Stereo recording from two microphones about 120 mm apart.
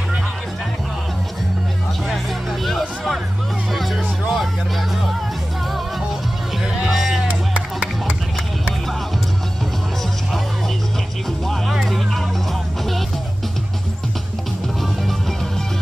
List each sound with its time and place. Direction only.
2.6 s music: centre (ahead or behind)
6.8 s music: centre (ahead or behind)
11.4 s music: centre (ahead or behind)